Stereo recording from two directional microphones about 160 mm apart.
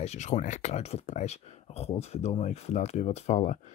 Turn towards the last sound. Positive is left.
turn(degrees=45)  # may be behind; listen again after turning